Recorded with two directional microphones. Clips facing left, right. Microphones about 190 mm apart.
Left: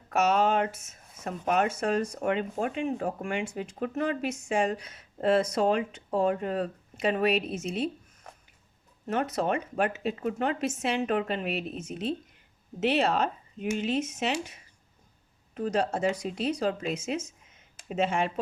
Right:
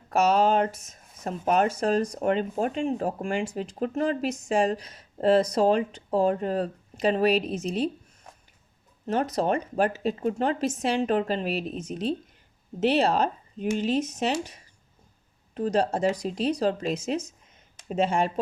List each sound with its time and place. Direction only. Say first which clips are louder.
0.1 s speech: right 3 dB; 35° right (ahead or behind)
9.0 s speech: right 3 dB; 35° right (ahead or behind)